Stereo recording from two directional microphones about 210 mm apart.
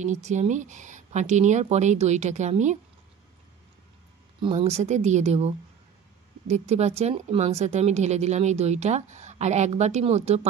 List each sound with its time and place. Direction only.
0.0 s speech: 35° right (ahead or behind)
4.4 s speech: 25° right (ahead or behind)